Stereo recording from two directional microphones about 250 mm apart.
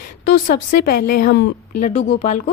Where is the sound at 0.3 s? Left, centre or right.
Left.